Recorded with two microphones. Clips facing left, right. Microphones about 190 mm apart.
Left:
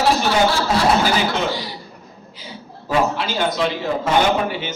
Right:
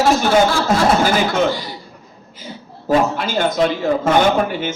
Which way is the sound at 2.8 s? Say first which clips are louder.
Right 3 dB; 50° right (ahead or behind).